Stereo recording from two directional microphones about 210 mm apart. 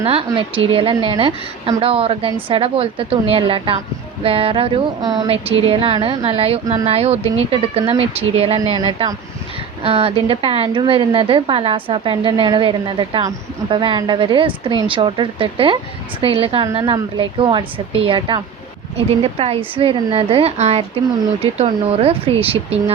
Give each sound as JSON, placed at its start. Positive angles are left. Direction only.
{"t": 0.0, "sound": "a woman's voice", "side_deg": -25}